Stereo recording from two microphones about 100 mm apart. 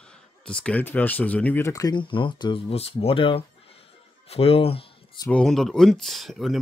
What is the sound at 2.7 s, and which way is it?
Speech, 85° left.